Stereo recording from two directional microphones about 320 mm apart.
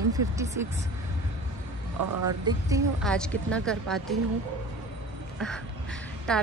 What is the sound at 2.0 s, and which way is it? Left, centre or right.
Speech, right.